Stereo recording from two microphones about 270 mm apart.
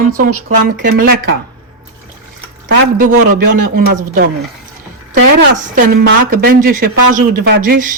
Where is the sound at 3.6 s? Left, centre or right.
Right.